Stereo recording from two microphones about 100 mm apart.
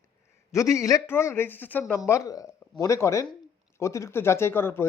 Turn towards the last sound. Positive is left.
turn(degrees=25)  # may be behind; listen again after turning